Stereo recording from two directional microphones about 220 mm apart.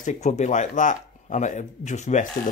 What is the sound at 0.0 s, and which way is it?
Speech, 35° left (ahead or behind).